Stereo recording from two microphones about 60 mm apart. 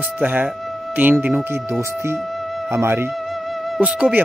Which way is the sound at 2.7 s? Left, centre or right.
Right.